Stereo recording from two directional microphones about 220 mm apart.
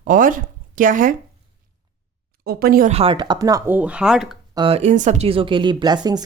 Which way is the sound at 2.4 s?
45° right (ahead or behind).